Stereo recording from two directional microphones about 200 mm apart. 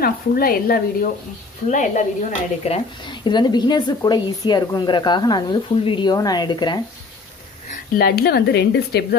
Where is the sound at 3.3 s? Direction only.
20° left (ahead or behind).